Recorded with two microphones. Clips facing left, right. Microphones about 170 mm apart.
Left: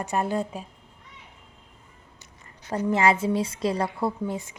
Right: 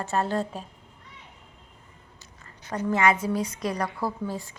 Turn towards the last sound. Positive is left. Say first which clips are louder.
# left 2 dB
turn(degrees=20)  # may be behind; listen again after turning